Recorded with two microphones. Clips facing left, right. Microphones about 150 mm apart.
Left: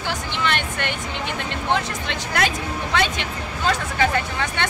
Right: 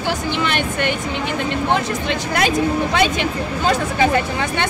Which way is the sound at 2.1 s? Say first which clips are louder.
Right 4 dB; 15° right (ahead or behind).